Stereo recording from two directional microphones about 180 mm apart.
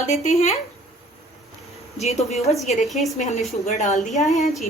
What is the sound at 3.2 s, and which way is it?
Speech, 40° left (ahead or behind).